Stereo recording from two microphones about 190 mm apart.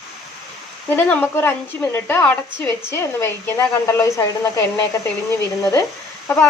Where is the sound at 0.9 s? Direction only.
10° left (ahead or behind).